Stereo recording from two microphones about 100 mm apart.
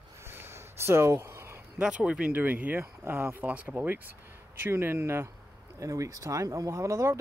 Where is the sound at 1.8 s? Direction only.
10° right (ahead or behind); by 7.2 s 30° right (ahead or behind).